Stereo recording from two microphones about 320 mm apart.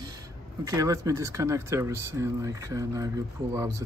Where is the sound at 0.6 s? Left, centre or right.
Centre.